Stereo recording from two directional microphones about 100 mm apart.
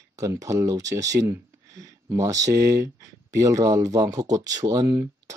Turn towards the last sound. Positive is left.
turn(degrees=-35)  # may be behind; listen again after turning